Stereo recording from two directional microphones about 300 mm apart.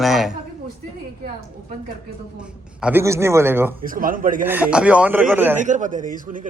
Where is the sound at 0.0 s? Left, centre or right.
Centre.